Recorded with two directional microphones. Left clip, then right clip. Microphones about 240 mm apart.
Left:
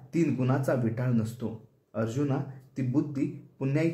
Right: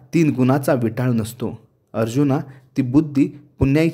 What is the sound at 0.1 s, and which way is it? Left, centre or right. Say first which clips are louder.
Speech: right 10 dB; right.